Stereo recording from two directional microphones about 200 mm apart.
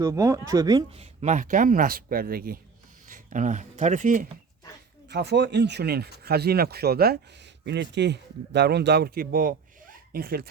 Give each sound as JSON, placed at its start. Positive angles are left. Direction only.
{"t": 0.0, "sound": "speech", "side_deg": -15}
{"t": 0.9, "sound": "speech", "side_deg": -35}
{"t": 5.0, "sound": "speech", "side_deg": -55}